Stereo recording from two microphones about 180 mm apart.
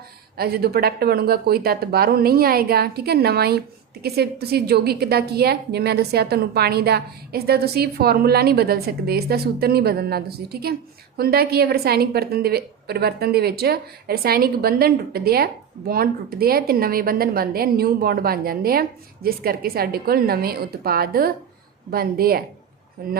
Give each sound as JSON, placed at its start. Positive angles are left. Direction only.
{"t": 0.3, "sound": "a woman's voice", "side_deg": -60}